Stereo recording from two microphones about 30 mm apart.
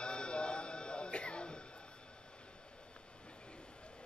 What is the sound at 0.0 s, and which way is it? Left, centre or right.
Music, left.